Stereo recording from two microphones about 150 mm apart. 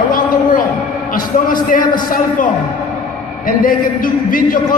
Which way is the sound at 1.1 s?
65° left (ahead or behind).